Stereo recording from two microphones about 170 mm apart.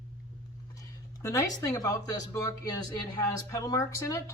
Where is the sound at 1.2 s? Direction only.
20° left (ahead or behind).